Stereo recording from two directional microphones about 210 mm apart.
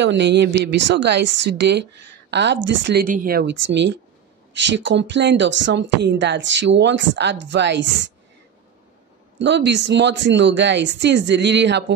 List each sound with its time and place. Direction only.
0.0 s speech: 55° right (ahead or behind)
9.4 s speech: 55° right (ahead or behind)